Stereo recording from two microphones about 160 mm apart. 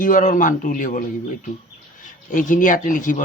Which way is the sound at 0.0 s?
55° left (ahead or behind).